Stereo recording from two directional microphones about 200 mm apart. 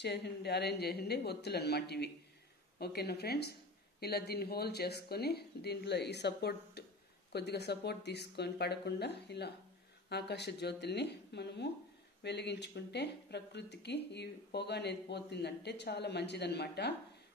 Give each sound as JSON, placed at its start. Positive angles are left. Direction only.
{"t": 0.0, "sound": "speech", "side_deg": 55}